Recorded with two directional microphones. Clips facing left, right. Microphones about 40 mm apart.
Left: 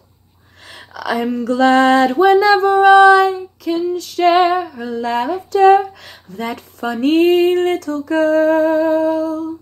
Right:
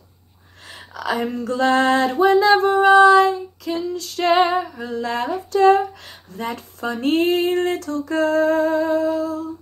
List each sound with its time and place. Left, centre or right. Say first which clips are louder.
0.7 s a sound: left 3 dB; left
1.2 s music: left 7 dB; left
6.8 s music: left 6 dB; left